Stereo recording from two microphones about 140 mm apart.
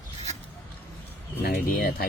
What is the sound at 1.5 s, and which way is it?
Speech, 90° left.